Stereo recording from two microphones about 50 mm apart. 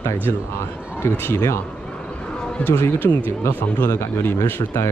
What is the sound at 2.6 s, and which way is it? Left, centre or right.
Speech, left.